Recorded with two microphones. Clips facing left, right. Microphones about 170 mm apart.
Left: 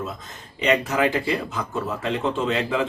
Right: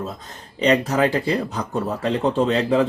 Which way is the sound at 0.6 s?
35° right (ahead or behind).